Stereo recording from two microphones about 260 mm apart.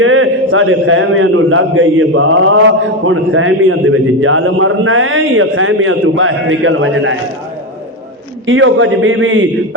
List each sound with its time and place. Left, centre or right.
0.0 s a man's voice: right
8.4 s a man's voice: right